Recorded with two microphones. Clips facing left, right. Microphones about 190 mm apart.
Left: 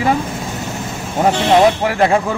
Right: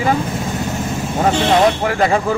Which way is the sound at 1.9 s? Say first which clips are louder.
Left 1 dB; 5° left (ahead or behind).